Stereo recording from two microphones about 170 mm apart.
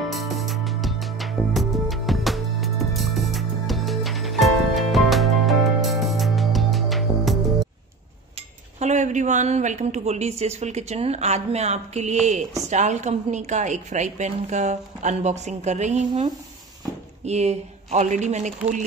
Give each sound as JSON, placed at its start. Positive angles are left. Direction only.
{"t": 0.1, "sound": "music", "side_deg": 0}
{"t": 8.7, "sound": "a woman's voice", "side_deg": -45}